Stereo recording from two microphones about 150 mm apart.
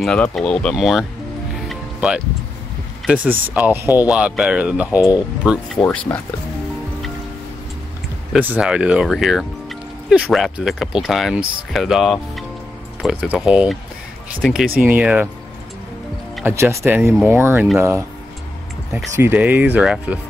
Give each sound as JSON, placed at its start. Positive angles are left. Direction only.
{"t": 0.0, "sound": "speech", "side_deg": 5}
{"t": 1.7, "sound": "music", "side_deg": -5}
{"t": 3.1, "sound": "speech", "side_deg": -10}
{"t": 5.8, "sound": "speech", "side_deg": 10}
{"t": 8.3, "sound": "speech", "side_deg": -10}
{"t": 16.4, "sound": "speech", "side_deg": -15}
{"t": 19.1, "sound": "speech", "side_deg": -15}